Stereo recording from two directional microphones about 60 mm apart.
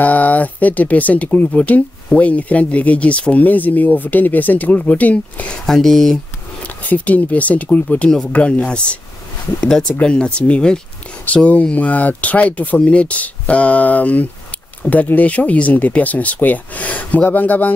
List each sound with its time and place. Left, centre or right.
0.0 s speech: left
5.7 s speech: centre
6.8 s speech: left